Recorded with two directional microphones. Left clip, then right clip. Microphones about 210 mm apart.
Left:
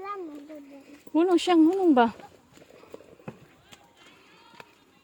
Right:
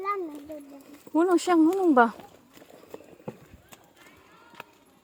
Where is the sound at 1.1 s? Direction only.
15° left (ahead or behind).